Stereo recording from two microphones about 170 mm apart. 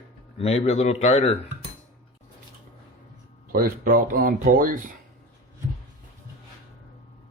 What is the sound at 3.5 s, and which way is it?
Speech, 55° right (ahead or behind).